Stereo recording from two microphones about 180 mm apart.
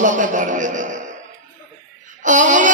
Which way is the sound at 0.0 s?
45° right (ahead or behind).